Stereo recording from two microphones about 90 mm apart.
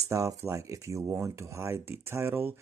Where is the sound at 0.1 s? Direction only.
35° right (ahead or behind).